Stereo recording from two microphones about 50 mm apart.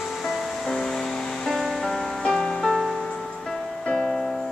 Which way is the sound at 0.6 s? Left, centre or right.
Centre.